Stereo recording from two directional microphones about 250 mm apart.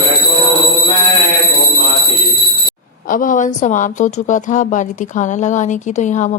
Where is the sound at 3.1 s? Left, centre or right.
Left.